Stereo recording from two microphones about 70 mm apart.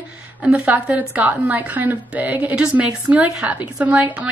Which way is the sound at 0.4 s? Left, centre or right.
Right.